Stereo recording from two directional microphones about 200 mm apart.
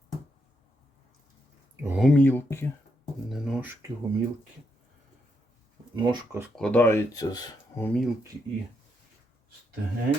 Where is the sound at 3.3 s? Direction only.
Centre (ahead or behind).